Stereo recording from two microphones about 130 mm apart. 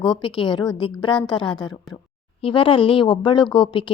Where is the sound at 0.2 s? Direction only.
40° left (ahead or behind).